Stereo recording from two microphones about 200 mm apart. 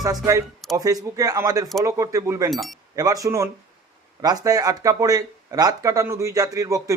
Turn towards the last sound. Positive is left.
turn(degrees=-15)  # may be behind; listen again after turning